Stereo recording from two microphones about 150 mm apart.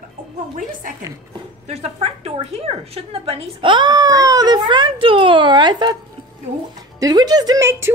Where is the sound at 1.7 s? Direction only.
45° right (ahead or behind); by 5.9 s 30° right (ahead or behind).